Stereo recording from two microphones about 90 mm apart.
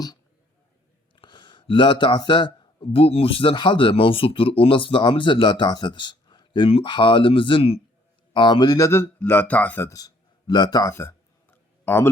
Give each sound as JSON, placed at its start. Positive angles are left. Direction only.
{"t": 1.1, "sound": "speech", "side_deg": 60}
{"t": 8.3, "sound": "speech", "side_deg": 60}
{"t": 9.3, "sound": "speech", "side_deg": 20}
{"t": 9.9, "sound": "speech", "side_deg": 45}
{"t": 11.5, "sound": "a sound", "side_deg": 25}